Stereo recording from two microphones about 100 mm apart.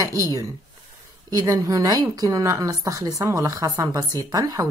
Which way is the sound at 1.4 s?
35° right (ahead or behind).